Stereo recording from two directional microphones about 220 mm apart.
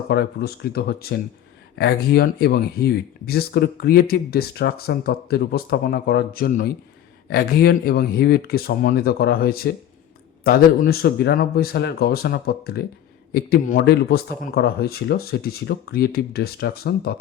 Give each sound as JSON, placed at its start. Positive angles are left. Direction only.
{"t": 0.1, "sound": "speech", "side_deg": 45}